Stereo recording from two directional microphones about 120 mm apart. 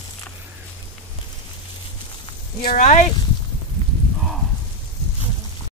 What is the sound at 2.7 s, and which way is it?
Speech, 90° left.